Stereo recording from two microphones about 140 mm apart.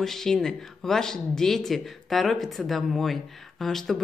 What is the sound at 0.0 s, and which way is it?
A woman's voice, 5° left (ahead or behind).